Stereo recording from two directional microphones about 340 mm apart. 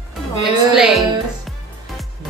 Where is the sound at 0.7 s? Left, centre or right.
Centre.